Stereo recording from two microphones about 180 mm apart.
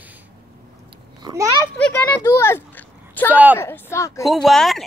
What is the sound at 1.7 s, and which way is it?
Speech, 10° left (ahead or behind).